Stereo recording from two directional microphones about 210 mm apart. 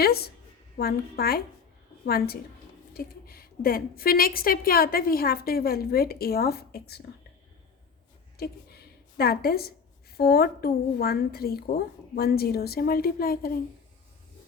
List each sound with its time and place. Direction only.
0.0 s a woman's voice: 50° left (ahead or behind)
8.4 s a woman's voice: 50° left (ahead or behind)